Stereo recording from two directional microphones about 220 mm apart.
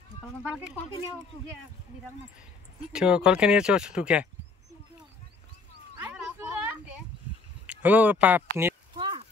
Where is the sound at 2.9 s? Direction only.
5° right (ahead or behind).